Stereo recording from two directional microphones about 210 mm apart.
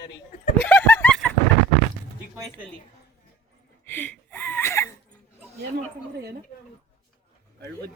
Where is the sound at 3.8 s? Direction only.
10° left (ahead or behind).